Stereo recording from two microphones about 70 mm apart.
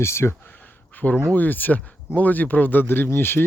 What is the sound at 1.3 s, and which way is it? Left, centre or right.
Speech, left.